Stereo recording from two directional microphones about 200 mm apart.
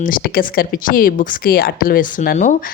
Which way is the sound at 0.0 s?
45° left (ahead or behind).